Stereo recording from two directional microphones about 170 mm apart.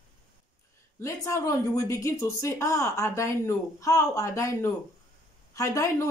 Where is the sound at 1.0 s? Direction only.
15° left (ahead or behind).